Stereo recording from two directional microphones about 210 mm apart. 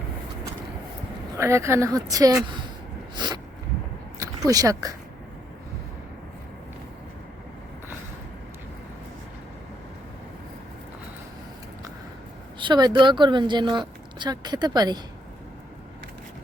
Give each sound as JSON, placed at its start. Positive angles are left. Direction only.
{"t": 1.4, "sound": "a woman's voice", "side_deg": -15}
{"t": 3.2, "sound": "a sound", "side_deg": -20}
{"t": 4.2, "sound": "speech", "side_deg": -15}
{"t": 12.5, "sound": "speech", "side_deg": -20}